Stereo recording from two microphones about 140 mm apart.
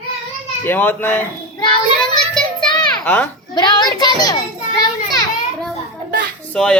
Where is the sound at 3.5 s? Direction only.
30° left (ahead or behind).